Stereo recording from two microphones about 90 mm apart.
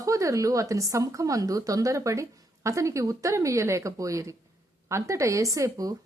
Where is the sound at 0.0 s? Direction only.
35° right (ahead or behind).